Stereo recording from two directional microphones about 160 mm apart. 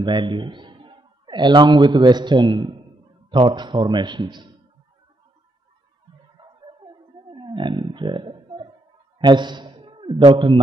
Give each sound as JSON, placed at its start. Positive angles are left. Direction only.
{"t": 0.0, "sound": "a man's voice", "side_deg": -30}
{"t": 6.4, "sound": "a sound", "side_deg": -25}
{"t": 7.2, "sound": "roaring cats", "side_deg": -30}
{"t": 9.2, "sound": "a man's voice", "side_deg": -30}